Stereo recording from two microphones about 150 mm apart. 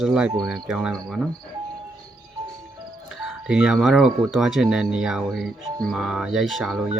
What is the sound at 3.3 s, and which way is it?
Speech, 5° right (ahead or behind).